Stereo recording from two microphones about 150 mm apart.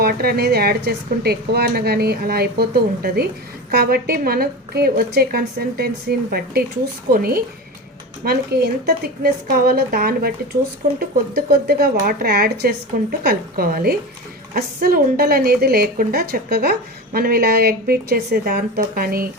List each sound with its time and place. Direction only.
0.0 s a woman's voice: 90° right
9.2 s a woman's voice: 80° right